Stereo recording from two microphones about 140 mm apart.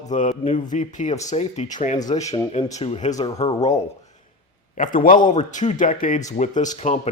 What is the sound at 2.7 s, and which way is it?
Speech, 50° left (ahead or behind).